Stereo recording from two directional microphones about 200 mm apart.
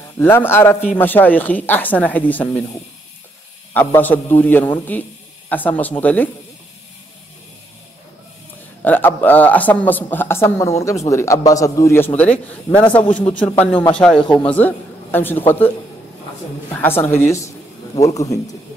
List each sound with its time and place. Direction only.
0.2 s a woman's voice: 10° left (ahead or behind)
3.7 s a woman's voice: 10° left (ahead or behind)
8.8 s a woman's voice: 10° left (ahead or behind)
16.7 s a woman's voice: 10° left (ahead or behind)